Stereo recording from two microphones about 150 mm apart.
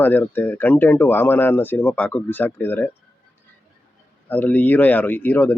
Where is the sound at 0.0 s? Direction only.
10° left (ahead or behind).